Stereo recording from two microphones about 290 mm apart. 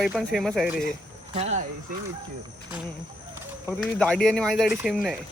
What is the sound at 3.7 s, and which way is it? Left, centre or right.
Speech, centre.